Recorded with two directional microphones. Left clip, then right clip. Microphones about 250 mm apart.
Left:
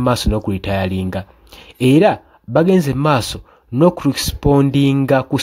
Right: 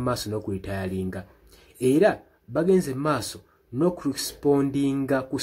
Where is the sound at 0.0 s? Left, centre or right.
Left.